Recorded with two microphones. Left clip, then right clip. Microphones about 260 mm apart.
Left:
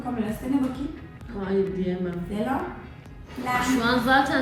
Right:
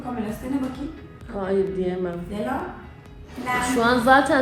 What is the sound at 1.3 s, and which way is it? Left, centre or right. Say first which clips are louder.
A woman's voice: right 3 dB; centre.